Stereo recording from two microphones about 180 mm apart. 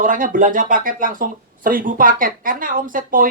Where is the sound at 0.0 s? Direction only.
50° right (ahead or behind).